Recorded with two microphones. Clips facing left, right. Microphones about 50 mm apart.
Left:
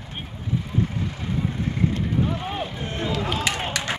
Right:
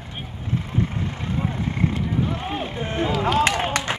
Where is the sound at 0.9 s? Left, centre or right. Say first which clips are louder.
Right 1 dB; right.